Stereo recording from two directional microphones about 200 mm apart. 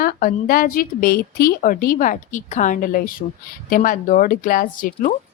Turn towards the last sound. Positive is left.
turn(degrees=45)  # may be behind; listen again after turning